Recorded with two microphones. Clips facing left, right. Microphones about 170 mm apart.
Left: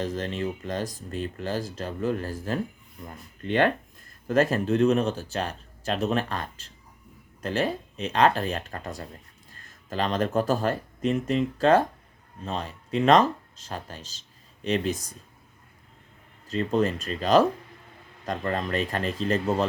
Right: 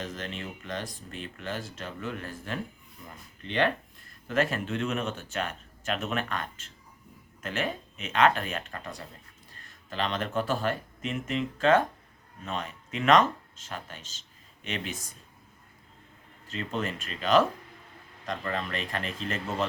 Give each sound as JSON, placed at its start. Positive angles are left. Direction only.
{"t": 0.0, "sound": "speech", "side_deg": 35}
{"t": 3.4, "sound": "speech", "side_deg": 45}
{"t": 16.5, "sound": "speech", "side_deg": 40}